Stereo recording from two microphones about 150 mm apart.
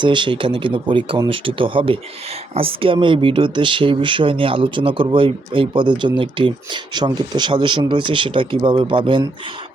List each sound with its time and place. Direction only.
0.0 s speech: 30° right (ahead or behind)